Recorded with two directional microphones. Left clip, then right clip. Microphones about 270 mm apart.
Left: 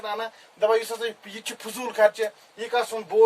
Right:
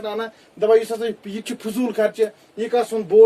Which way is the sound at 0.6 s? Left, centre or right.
Left.